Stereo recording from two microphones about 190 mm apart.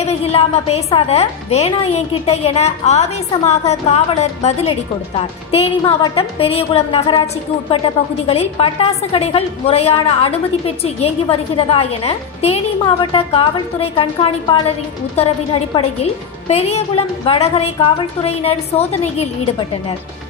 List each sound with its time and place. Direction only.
0.0 s a woman's voice: 30° left (ahead or behind)
8.3 s a woman's voice: 30° left (ahead or behind)